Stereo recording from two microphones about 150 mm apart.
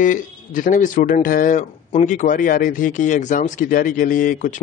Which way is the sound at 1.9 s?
50° left (ahead or behind).